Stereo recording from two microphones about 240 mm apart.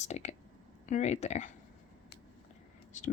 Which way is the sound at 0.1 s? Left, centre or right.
Left.